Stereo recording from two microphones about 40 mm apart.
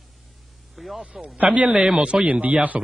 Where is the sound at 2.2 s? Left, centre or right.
Right.